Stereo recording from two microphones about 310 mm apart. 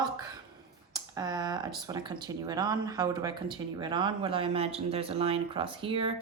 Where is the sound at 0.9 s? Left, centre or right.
Centre.